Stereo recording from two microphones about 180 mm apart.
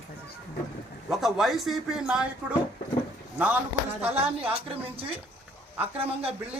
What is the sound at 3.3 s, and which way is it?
Speech, 10° right (ahead or behind).